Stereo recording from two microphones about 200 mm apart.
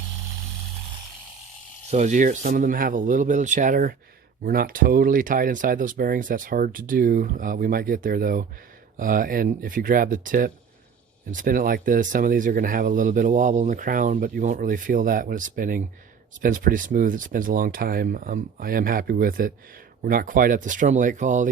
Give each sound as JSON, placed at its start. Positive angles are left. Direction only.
{"t": 1.9, "sound": "speech", "side_deg": -35}